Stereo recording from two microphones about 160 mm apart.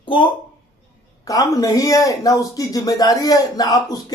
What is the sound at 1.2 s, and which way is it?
Speech, 20° left (ahead or behind).